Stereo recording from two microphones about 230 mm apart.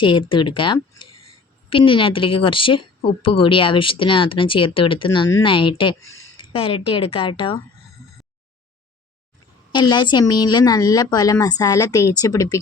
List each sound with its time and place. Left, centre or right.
0.0 s speech: left
9.7 s a woman's voice: centre